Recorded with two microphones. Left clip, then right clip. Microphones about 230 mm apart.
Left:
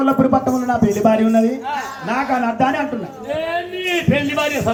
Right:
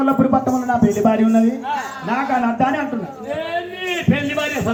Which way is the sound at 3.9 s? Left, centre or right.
Left.